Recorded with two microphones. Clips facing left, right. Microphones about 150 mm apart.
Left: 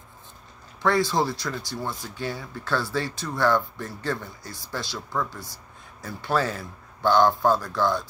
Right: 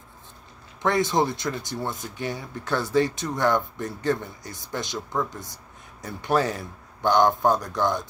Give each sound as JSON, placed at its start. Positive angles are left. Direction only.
{"t": 0.8, "sound": "speech", "side_deg": -20}